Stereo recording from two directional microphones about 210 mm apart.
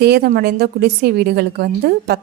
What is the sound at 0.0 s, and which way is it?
A woman's voice, 50° right (ahead or behind).